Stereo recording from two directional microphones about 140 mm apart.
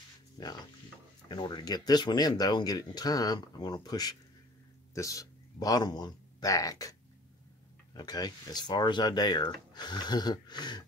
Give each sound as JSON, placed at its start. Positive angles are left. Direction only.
{"t": 0.4, "sound": "speech", "side_deg": 30}